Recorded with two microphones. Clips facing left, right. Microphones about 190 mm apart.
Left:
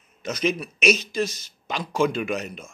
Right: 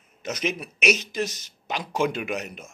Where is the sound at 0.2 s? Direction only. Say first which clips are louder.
Left 4 dB; 20° right (ahead or behind).